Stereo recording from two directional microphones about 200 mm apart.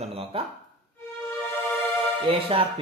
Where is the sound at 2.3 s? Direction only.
25° right (ahead or behind).